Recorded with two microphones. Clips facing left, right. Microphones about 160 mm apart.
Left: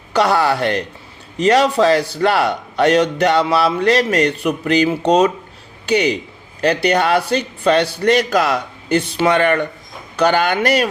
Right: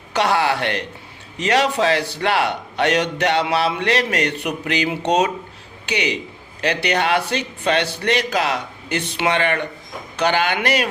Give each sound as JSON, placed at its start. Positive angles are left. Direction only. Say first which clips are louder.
{"t": 0.1, "sound": "a man's voice", "louder": "left 3 dB", "side_deg": 40}